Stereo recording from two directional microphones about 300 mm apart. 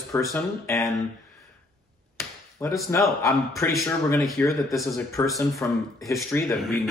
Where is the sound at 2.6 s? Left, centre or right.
Centre.